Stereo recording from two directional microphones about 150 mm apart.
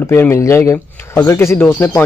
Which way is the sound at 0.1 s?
15° left (ahead or behind).